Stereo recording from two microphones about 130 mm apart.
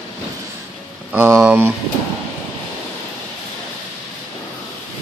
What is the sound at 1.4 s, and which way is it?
Speech, 10° right (ahead or behind).